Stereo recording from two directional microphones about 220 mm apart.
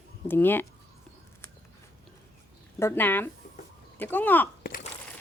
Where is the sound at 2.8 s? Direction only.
10° left (ahead or behind).